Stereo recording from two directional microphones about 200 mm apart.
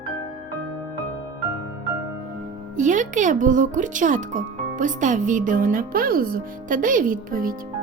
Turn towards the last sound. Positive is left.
turn(degrees=-45)  # may be behind; listen again after turning